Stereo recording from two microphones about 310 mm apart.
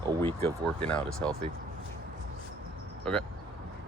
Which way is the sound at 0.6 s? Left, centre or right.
Centre.